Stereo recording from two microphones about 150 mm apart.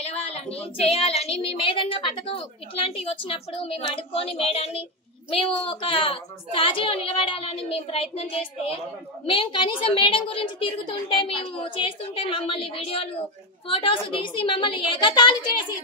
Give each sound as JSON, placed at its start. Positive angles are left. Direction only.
{"t": 0.0, "sound": "a woman's voice", "side_deg": 45}